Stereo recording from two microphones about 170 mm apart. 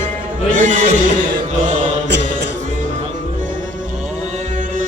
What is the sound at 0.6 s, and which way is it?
Music, 45° right (ahead or behind).